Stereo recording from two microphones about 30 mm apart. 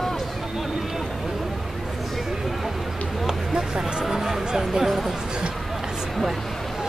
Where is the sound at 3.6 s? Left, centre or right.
Right.